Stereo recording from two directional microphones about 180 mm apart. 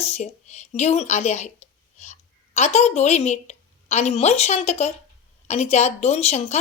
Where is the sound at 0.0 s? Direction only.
40° left (ahead or behind).